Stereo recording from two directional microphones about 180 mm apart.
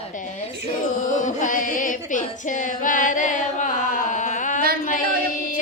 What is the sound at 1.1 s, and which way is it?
Female singing, 45° left (ahead or behind).